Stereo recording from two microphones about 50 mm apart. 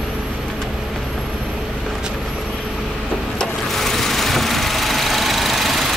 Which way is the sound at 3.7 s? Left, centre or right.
Centre.